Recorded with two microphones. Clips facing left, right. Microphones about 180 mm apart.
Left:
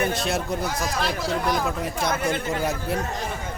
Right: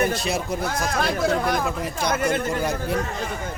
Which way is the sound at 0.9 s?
55° right (ahead or behind).